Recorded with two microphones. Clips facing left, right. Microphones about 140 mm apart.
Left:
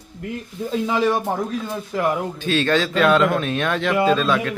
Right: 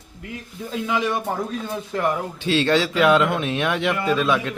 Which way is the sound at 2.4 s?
25° right (ahead or behind).